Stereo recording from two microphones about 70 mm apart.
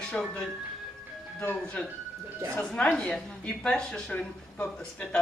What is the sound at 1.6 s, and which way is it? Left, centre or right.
A woman's voice, left.